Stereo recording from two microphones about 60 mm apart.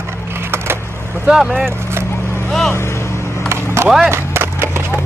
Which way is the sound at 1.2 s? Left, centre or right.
Centre.